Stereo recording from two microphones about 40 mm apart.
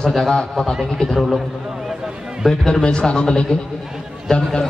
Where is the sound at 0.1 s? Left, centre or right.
Centre.